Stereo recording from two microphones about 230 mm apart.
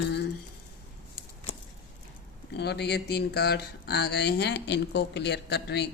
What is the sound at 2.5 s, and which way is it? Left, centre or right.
Speech, left.